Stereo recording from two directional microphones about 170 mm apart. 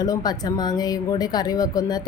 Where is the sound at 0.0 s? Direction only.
20° left (ahead or behind).